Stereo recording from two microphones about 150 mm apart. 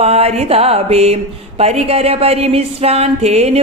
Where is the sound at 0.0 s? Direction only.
45° right (ahead or behind).